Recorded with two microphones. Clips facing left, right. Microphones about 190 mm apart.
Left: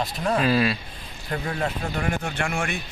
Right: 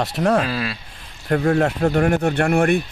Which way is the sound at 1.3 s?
55° right (ahead or behind).